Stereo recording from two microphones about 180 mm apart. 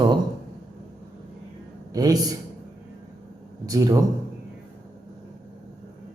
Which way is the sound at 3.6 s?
20° right (ahead or behind).